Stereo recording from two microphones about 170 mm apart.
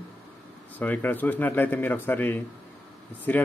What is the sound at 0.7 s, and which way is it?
Speech, 10° left (ahead or behind).